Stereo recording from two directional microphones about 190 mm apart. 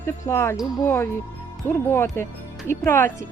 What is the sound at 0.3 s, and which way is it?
Speech, 15° left (ahead or behind).